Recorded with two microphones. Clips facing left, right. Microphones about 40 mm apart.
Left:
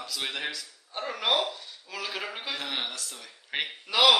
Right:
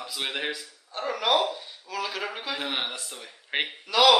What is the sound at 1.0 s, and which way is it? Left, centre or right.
A man's voice, centre.